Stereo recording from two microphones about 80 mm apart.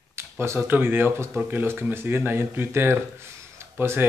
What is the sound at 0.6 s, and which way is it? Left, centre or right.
Speech, right.